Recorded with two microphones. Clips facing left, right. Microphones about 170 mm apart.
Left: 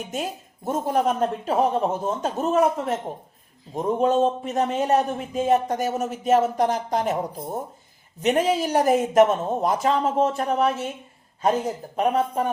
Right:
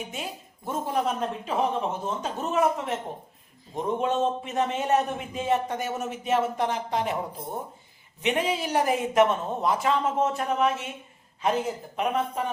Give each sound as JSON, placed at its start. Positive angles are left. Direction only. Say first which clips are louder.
{"t": 0.1, "sound": "a woman's voice", "louder": "left 6 dB", "side_deg": 45}
{"t": 8.2, "sound": "a man's voice", "louder": "left 5 dB", "side_deg": 40}